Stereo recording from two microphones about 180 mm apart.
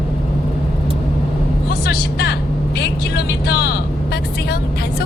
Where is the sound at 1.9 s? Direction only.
65° left (ahead or behind).